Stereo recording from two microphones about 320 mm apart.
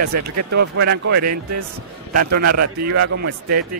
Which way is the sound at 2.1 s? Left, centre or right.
Right.